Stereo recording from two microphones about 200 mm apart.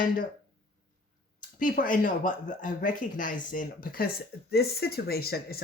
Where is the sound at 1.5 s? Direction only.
40° left (ahead or behind).